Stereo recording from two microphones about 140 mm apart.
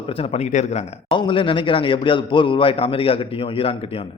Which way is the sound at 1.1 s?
35° left (ahead or behind).